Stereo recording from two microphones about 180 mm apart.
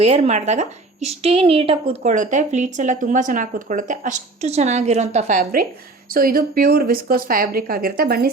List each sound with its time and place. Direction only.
0.0 s a woman's voice: 35° right (ahead or behind); by 8.3 s 55° right (ahead or behind)